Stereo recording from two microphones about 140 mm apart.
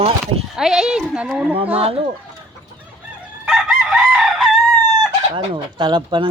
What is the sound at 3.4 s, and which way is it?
Chicken, 5° right (ahead or behind).